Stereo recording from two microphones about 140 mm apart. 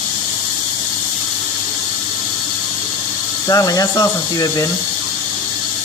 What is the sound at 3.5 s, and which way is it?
Speech, 25° left (ahead or behind).